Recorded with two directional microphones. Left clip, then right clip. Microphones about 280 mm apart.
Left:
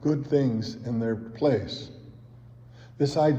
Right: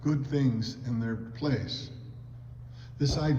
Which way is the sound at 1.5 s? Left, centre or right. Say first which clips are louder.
Left 6 dB; left.